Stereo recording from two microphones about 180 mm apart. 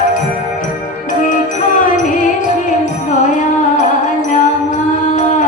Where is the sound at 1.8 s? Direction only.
45° left (ahead or behind).